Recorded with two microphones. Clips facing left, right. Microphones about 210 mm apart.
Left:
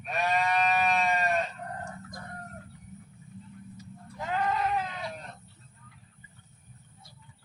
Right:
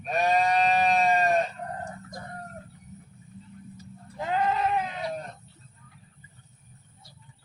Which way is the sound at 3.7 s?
30° right (ahead or behind).